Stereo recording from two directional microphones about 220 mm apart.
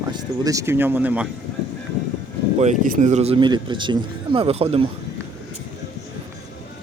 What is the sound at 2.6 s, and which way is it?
Speech, 30° right (ahead or behind).